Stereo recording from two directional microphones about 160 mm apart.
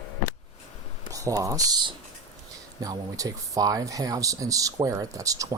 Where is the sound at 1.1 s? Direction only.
20° right (ahead or behind).